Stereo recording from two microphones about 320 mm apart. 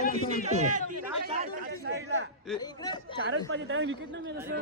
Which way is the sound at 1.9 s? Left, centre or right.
Right.